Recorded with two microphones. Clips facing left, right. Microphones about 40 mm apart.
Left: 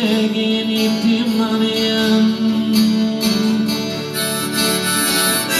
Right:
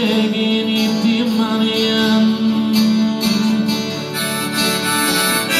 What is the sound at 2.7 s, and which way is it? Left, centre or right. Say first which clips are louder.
Music: even; centre.